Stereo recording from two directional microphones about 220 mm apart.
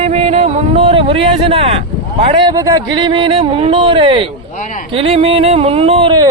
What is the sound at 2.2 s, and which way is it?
Speech, 20° right (ahead or behind).